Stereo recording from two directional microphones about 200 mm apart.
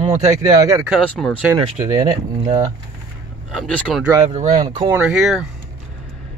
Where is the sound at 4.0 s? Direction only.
15° right (ahead or behind).